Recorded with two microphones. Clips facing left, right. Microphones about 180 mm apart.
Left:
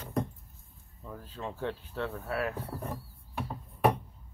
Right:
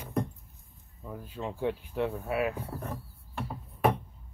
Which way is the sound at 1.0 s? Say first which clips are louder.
Right 3 dB; 10° right (ahead or behind).